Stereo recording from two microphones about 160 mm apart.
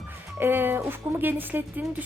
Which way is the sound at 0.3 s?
15° right (ahead or behind).